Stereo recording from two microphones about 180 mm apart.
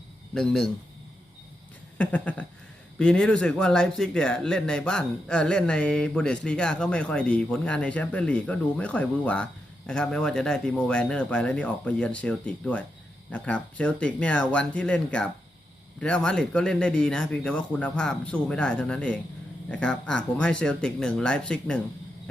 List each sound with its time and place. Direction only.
0.3 s speech: centre (ahead or behind)
2.0 s speech: 5° left (ahead or behind)